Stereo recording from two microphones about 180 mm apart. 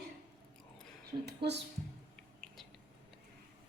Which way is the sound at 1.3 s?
65° right (ahead or behind).